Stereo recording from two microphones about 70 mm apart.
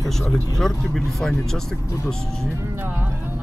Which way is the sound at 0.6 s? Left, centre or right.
Centre.